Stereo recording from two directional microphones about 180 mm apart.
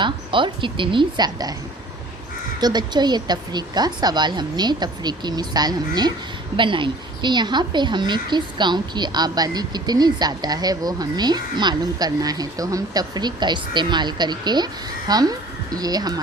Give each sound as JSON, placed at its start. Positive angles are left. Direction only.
{"t": 0.0, "sound": "a woman's voice", "side_deg": -25}
{"t": 2.6, "sound": "a woman's voice", "side_deg": -25}